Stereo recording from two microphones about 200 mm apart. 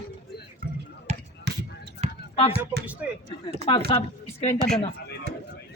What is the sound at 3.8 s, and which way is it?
Speech, 30° left (ahead or behind).